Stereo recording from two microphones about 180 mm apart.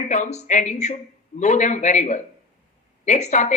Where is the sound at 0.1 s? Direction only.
40° left (ahead or behind).